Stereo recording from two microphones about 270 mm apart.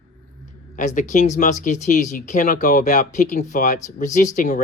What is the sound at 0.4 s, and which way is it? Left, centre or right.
Speech, left.